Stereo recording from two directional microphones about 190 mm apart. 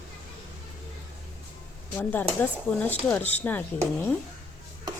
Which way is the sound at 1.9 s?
10° left (ahead or behind).